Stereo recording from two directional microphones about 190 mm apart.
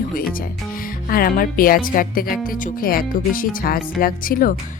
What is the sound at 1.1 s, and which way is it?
Speech, 50° left (ahead or behind).